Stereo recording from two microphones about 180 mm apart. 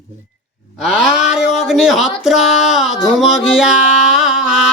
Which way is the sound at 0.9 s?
5° right (ahead or behind).